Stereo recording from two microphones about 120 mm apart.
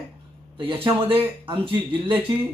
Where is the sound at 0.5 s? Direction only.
45° right (ahead or behind).